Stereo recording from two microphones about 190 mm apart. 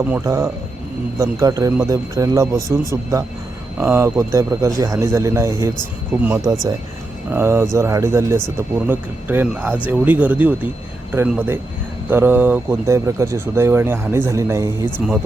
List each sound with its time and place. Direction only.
0.0 s speech: 10° right (ahead or behind)
14.9 s speech: 5° right (ahead or behind)